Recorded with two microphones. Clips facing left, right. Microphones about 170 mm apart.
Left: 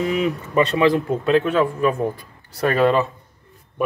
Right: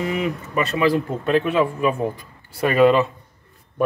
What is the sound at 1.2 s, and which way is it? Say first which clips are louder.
Speech: left 1 dB; 5° right (ahead or behind).